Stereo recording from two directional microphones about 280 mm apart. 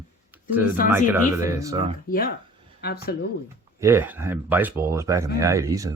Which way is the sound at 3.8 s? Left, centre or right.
Centre.